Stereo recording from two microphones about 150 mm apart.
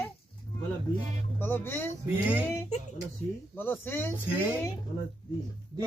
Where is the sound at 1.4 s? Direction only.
15° left (ahead or behind).